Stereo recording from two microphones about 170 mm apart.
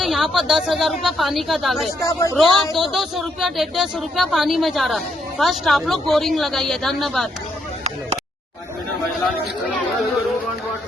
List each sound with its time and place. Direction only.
0.0 s speech: centre (ahead or behind)
2.0 s speech: 20° left (ahead or behind)
2.3 s speech: centre (ahead or behind)